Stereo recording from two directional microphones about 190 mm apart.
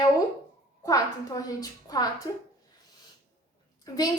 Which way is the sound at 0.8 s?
20° left (ahead or behind).